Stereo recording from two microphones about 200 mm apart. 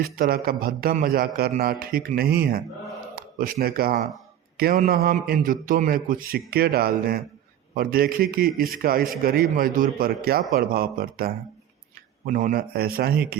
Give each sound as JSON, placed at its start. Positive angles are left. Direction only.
{"t": 0.0, "sound": "a man's voice", "side_deg": -50}